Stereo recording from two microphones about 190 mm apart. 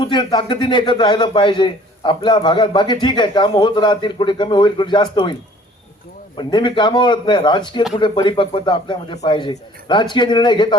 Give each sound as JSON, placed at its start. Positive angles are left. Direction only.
{"t": 0.0, "sound": "a man's voice", "side_deg": 25}
{"t": 6.3, "sound": "a man's voice", "side_deg": 25}